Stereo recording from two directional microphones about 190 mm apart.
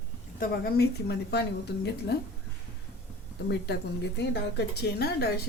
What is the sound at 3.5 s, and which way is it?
A woman's voice, 60° left (ahead or behind).